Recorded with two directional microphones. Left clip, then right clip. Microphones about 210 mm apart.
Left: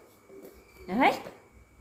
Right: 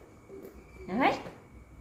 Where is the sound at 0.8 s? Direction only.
55° left (ahead or behind).